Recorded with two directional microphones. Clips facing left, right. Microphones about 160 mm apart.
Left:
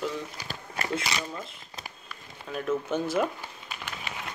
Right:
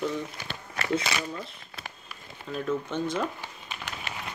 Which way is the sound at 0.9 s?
Centre (ahead or behind).